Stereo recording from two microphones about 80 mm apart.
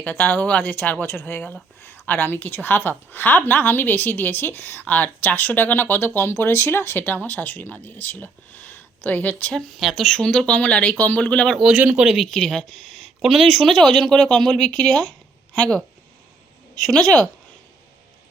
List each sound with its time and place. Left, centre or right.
0.0 s a woman's voice: left
9.6 s speech: centre
11.7 s speech: centre
12.0 s speech: centre
16.8 s speech: centre